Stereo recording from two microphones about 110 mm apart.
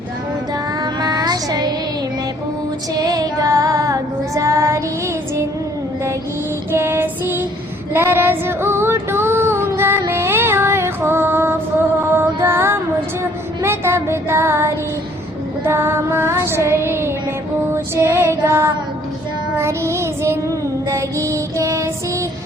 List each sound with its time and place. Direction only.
0.8 s music: 40° right (ahead or behind)
3.0 s female singing: 35° right (ahead or behind)
6.7 s female singing: 20° right (ahead or behind)
7.9 s child singing: 20° right (ahead or behind)
12.1 s female singing: 20° right (ahead or behind)
13.6 s a sound: 25° right (ahead or behind)
15.6 s child singing: 20° right (ahead or behind)
17.7 s female singing: 25° right (ahead or behind)
19.5 s child singing: 25° right (ahead or behind)